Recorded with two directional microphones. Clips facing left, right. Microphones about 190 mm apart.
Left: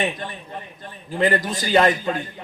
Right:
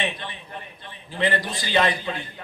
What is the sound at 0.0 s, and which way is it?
A man's voice, 45° left (ahead or behind).